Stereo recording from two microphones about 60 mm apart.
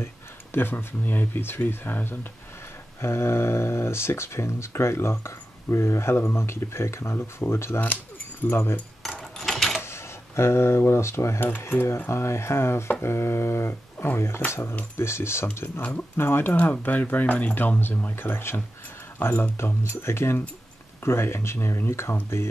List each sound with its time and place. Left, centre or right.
0.0 s speech: left
9.4 s a sound: centre
9.8 s speech: left
18.1 s speech: left
19.5 s speech: left